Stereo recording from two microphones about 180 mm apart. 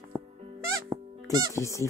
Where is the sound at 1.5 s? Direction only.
15° left (ahead or behind).